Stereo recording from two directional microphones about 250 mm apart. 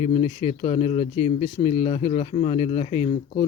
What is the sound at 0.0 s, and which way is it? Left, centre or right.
A man's voice, left.